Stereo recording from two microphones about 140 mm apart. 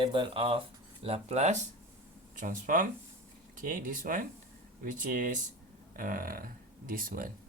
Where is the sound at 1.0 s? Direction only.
50° right (ahead or behind).